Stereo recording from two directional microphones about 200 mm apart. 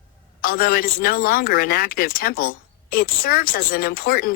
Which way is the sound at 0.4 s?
50° left (ahead or behind).